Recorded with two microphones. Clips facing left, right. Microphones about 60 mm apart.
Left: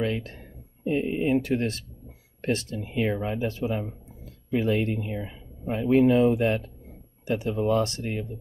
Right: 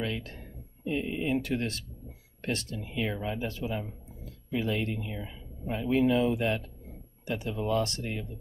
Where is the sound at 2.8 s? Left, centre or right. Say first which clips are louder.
Left 6 dB; left.